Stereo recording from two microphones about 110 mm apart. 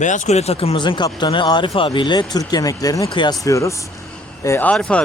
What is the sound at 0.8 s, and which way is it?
Speech, 45° left (ahead or behind).